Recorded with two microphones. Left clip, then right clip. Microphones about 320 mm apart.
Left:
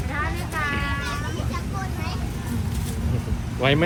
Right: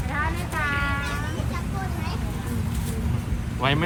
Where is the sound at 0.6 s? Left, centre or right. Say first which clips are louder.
Right 1 dB; right.